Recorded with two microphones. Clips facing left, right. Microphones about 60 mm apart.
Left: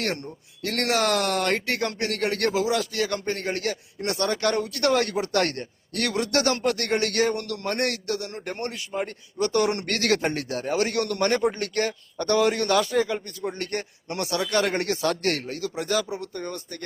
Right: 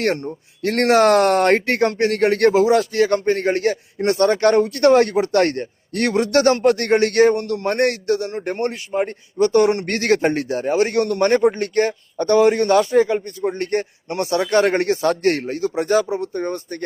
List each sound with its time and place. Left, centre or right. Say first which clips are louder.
0.0 s speech: right 8 dB; right
8.9 s speech: right 8 dB; right